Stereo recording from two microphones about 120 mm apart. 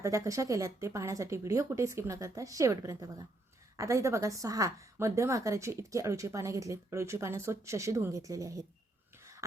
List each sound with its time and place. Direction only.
0.0 s a woman's voice: 25° right (ahead or behind)